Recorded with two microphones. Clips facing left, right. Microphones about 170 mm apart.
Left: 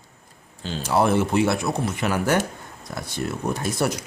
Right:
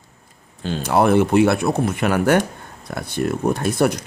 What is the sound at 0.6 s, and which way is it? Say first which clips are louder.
A man's voice: right 4 dB; 55° right (ahead or behind).